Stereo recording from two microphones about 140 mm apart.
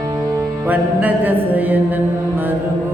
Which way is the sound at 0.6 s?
10° right (ahead or behind).